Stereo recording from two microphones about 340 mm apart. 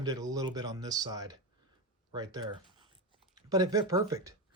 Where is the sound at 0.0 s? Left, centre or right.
Centre.